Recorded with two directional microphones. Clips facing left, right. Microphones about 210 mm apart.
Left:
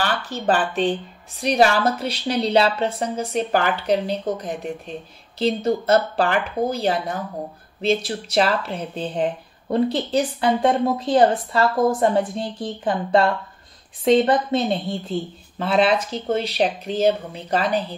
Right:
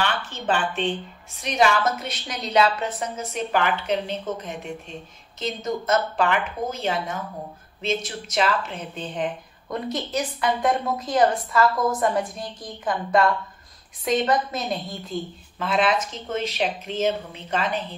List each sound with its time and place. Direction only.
0.0 s a woman's voice: 35° left (ahead or behind)